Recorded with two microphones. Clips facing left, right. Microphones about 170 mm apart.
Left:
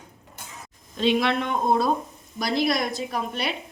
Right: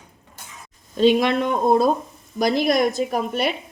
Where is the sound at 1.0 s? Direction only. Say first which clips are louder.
Right 5 dB; 45° right (ahead or behind).